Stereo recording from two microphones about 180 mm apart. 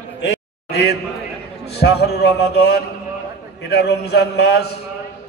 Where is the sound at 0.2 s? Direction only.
65° left (ahead or behind).